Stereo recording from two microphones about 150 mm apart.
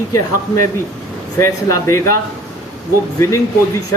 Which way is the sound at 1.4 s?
20° left (ahead or behind).